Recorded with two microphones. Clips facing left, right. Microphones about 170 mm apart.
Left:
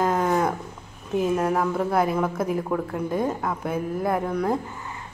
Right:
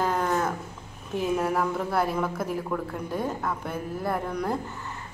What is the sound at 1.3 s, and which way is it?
A woman's voice, 5° left (ahead or behind).